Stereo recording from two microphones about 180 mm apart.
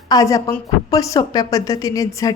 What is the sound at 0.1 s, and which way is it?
A woman's voice, 20° left (ahead or behind).